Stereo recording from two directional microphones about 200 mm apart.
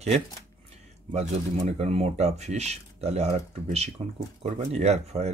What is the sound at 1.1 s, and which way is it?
Speech, 35° right (ahead or behind).